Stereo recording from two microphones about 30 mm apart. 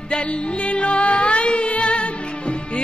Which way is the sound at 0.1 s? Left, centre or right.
Left.